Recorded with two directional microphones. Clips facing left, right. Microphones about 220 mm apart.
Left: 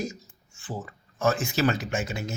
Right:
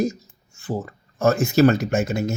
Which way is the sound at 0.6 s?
40° right (ahead or behind).